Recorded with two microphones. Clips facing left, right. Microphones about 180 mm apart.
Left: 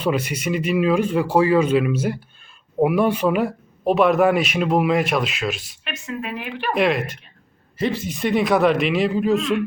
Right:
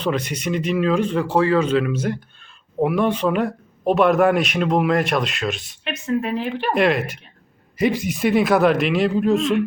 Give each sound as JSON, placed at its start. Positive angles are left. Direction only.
{"t": 0.0, "sound": "a man's voice", "side_deg": 10}
{"t": 5.9, "sound": "speech", "side_deg": -35}
{"t": 6.7, "sound": "a man's voice", "side_deg": 0}
{"t": 7.8, "sound": "a man's voice", "side_deg": -10}